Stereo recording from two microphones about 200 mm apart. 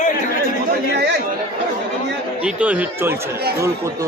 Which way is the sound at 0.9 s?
55° right (ahead or behind).